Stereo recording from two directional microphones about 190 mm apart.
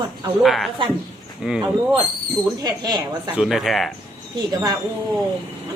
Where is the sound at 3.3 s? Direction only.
Centre (ahead or behind).